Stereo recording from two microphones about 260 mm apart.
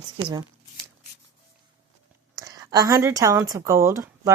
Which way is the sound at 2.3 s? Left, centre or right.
Centre.